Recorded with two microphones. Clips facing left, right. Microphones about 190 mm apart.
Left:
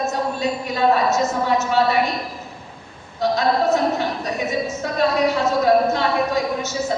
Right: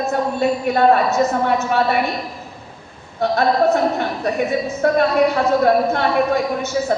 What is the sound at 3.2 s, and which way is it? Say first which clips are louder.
A woman's voice: right 3 dB; 60° right (ahead or behind).